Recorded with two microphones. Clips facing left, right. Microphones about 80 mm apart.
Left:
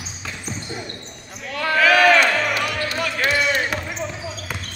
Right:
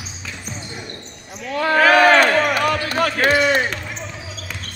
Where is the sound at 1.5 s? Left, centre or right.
Right.